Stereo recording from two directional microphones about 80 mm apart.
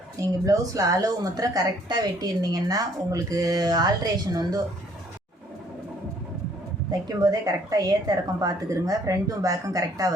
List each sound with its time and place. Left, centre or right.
0.2 s a woman's voice: right
7.2 s a woman's voice: right